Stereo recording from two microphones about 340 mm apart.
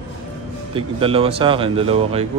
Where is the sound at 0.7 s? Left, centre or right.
Centre.